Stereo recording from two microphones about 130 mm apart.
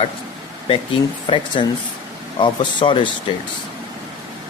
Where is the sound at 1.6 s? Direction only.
40° left (ahead or behind).